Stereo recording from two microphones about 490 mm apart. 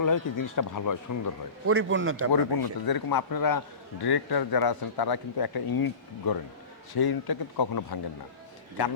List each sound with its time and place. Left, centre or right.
0.0 s speech: left
1.6 s a man's voice: right
2.3 s speech: left